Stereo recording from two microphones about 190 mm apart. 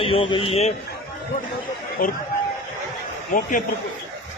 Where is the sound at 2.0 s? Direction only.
45° left (ahead or behind).